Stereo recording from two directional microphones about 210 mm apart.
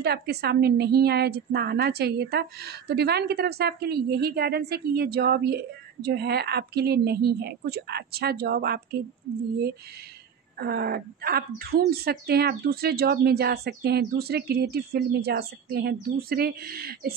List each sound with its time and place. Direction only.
0.0 s speech: 50° right (ahead or behind)
10.6 s speech: 50° right (ahead or behind)